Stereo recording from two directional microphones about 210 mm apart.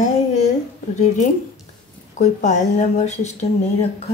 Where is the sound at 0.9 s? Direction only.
35° left (ahead or behind).